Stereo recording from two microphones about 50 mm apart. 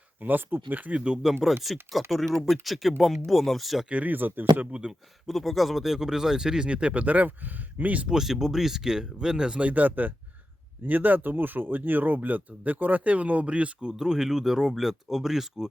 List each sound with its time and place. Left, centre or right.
0.2 s speech: right
1.6 s speech: centre
3.8 s speech: right
4.1 s speech: right
4.7 s speech: centre
5.2 s speech: centre; by 8.0 s right
8.0 s speech: centre; by 13.7 s right
13.9 s speech: centre